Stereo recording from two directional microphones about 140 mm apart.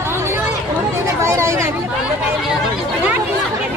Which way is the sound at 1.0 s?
20° right (ahead or behind).